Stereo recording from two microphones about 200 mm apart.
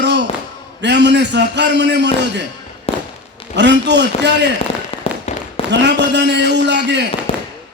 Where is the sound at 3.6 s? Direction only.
60° right (ahead or behind).